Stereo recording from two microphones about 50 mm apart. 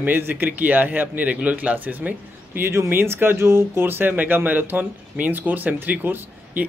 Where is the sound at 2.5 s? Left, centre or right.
Right.